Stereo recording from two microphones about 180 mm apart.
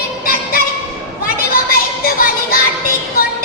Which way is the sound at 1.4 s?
55° left (ahead or behind).